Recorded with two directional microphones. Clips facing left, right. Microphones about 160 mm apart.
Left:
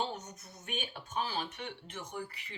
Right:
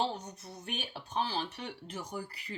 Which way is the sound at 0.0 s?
30° right (ahead or behind).